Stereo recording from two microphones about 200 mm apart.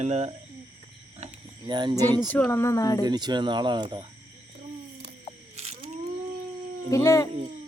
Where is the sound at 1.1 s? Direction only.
25° right (ahead or behind).